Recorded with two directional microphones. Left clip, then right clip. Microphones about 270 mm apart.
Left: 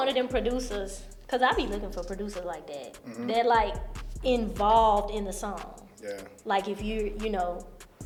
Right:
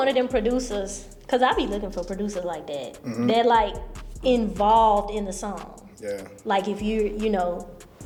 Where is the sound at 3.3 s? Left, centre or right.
Right.